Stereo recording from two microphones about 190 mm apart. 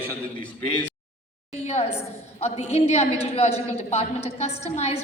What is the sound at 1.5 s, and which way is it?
A woman's voice, 35° left (ahead or behind).